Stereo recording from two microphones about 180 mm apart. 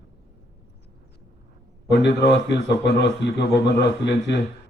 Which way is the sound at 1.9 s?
70° left (ahead or behind).